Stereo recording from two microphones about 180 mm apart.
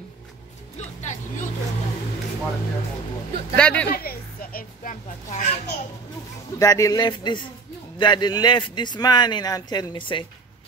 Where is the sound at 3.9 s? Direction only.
55° left (ahead or behind).